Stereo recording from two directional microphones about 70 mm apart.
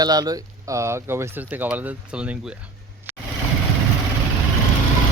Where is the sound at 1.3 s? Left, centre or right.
Right.